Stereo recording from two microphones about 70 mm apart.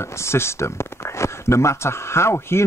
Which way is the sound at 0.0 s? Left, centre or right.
Left.